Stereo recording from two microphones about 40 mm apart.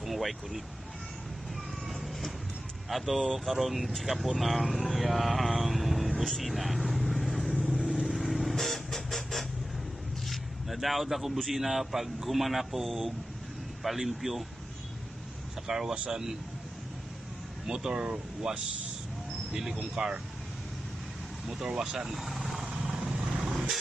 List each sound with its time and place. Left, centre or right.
0.0 s a sound: centre
1.9 s vehicle: centre
2.9 s speech: centre
6.4 s vehicle: centre
7.7 s vehicle: centre
11.5 s speech: centre
15.6 s speech: centre
17.6 s speech: centre
19.8 s speech: right
21.8 s speech: centre
22.1 s vehicle: centre